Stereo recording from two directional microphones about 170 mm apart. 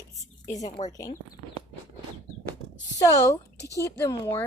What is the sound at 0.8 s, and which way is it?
Speech, 40° left (ahead or behind).